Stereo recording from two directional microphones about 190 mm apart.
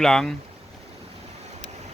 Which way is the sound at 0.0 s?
Centre (ahead or behind).